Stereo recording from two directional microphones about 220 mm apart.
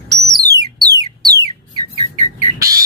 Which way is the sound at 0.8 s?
15° right (ahead or behind).